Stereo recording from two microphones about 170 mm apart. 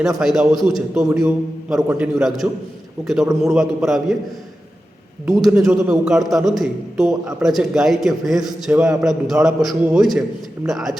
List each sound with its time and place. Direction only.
0.2 s a man's voice: centre (ahead or behind)
5.3 s a man's voice: centre (ahead or behind)